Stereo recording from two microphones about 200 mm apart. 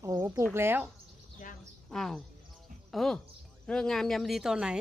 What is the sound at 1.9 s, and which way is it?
A woman's voice, centre (ahead or behind).